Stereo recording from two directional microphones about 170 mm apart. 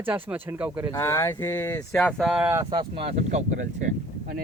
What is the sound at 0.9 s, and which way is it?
Speech, 15° left (ahead or behind).